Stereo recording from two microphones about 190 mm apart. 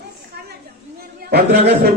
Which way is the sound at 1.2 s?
50° right (ahead or behind).